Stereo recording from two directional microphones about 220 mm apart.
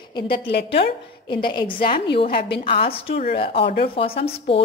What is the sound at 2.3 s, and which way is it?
Speech, 45° left (ahead or behind).